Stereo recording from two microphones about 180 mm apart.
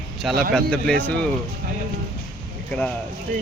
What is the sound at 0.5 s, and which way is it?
Speech, 5° left (ahead or behind).